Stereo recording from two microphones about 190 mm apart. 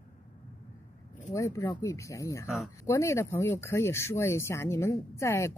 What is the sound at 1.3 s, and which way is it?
Speech, 15° left (ahead or behind).